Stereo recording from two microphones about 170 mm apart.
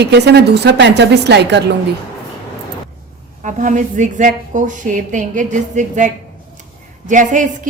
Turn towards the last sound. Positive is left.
turn(degrees=-50)  # may be behind; listen again after turning